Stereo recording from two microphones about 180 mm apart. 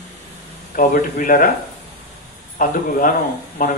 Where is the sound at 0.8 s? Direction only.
50° left (ahead or behind).